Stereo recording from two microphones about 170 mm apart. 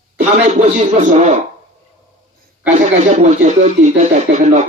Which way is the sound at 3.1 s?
45° right (ahead or behind).